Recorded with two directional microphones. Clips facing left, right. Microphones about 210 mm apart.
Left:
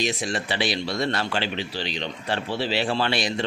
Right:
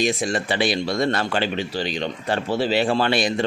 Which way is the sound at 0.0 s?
50° right (ahead or behind).